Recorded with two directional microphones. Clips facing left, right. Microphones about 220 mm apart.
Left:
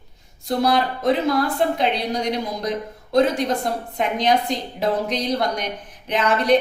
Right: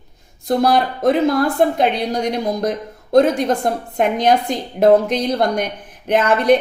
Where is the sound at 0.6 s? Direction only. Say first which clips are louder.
Right 3 dB; 50° right (ahead or behind).